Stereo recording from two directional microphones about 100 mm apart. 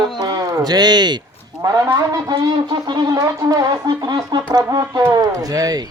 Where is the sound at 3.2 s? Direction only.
35° right (ahead or behind).